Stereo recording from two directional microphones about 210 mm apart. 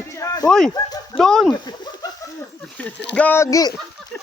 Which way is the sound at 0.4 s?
Centre (ahead or behind).